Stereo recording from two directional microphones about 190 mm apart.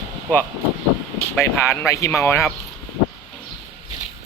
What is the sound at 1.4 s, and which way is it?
Speech, 15° left (ahead or behind).